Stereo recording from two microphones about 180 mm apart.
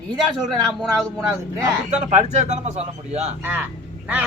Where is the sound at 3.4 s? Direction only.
10° right (ahead or behind).